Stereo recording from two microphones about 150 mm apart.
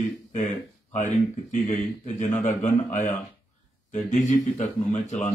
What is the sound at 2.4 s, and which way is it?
Speech, 55° left (ahead or behind).